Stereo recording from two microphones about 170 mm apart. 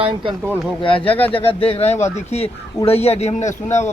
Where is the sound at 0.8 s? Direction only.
30° left (ahead or behind).